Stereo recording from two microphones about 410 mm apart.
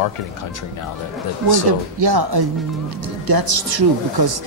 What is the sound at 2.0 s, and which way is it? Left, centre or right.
Speech, right.